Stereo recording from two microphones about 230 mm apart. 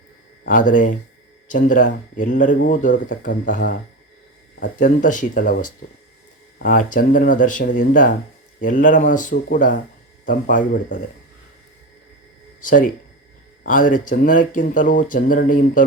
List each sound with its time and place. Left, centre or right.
0.4 s speech: left
12.6 s speech: left